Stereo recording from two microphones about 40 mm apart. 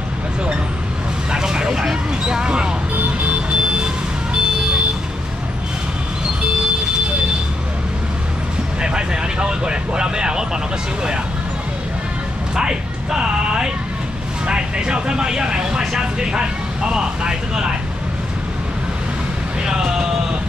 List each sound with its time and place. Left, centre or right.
1.3 s vehicle: right
8.8 s speech: right
12.5 s speech: centre
19.6 s speech: centre